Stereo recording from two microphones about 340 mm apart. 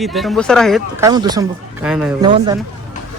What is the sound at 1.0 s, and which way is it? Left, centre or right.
Speech, centre.